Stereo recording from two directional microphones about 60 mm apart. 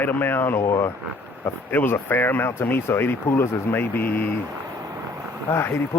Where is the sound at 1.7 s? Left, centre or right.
Left.